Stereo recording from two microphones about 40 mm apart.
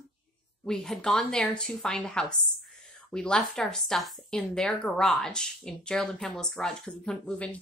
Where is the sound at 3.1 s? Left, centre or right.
Centre.